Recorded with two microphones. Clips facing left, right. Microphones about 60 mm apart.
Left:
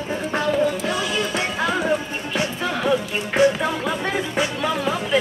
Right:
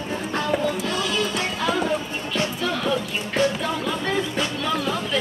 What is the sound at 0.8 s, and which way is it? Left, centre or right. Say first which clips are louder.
Music: left 1 dB; left.